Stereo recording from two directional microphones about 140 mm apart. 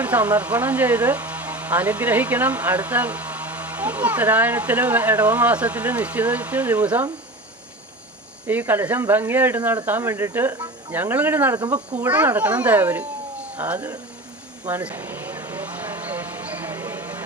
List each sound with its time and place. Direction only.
0.0 s speech: 10° right (ahead or behind)
8.4 s speech: 15° right (ahead or behind)
14.6 s a sound: 15° right (ahead or behind)